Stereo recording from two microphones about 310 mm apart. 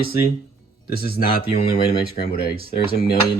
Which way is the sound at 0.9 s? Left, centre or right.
Left.